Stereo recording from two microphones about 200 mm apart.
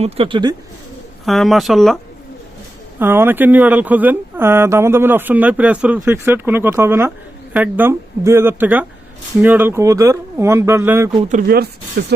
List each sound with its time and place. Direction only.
0.0 s speech: 25° right (ahead or behind)
1.2 s speech: centre (ahead or behind)
3.0 s speech: 10° right (ahead or behind)
11.1 s speech: 35° right (ahead or behind); by 12.0 s 50° right (ahead or behind)